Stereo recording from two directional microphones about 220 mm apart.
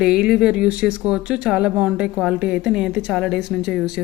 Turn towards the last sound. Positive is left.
turn(degrees=0)  # may be behind; listen again after turning